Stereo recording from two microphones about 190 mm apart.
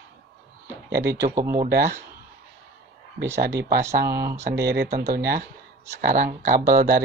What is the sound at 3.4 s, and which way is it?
Speech, 60° right (ahead or behind).